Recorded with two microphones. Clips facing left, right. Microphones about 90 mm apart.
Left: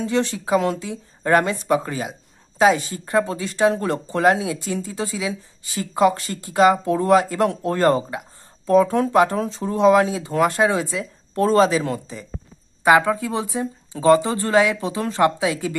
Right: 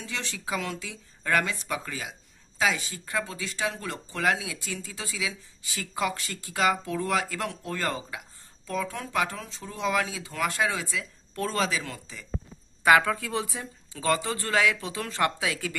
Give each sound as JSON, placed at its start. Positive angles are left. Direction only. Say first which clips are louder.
{"t": 0.0, "sound": "speech", "louder": "left 14 dB", "side_deg": 40}
{"t": 12.8, "sound": "speech", "louder": "left 5 dB", "side_deg": 20}